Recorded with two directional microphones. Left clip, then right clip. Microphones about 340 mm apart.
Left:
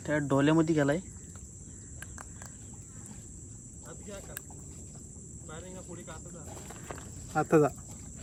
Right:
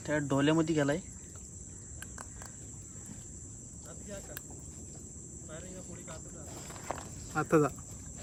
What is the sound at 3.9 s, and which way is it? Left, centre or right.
Cricket, centre.